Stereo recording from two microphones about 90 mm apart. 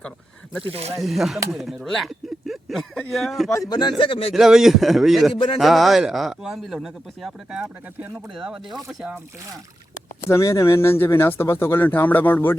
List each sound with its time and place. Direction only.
0.9 s speech: centre (ahead or behind)
3.7 s speech: 55° left (ahead or behind)
4.4 s speech: 5° right (ahead or behind)
10.2 s speech: 35° left (ahead or behind)